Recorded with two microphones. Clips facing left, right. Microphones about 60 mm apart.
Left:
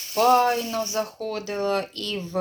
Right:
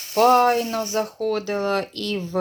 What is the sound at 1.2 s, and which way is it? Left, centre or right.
Speech, right.